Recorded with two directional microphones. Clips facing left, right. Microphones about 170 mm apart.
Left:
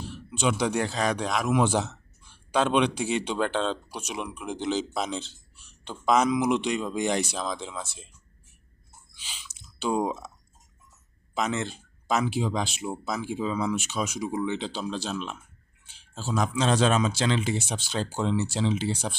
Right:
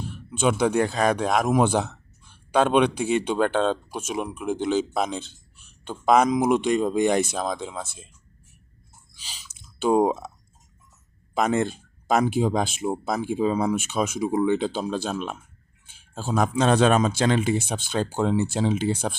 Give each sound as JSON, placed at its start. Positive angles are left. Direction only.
{"t": 0.0, "sound": "a man's voice", "side_deg": -50}
{"t": 9.1, "sound": "chewing", "side_deg": -40}
{"t": 9.5, "sound": "drip", "side_deg": -50}
{"t": 11.3, "sound": "speech", "side_deg": -50}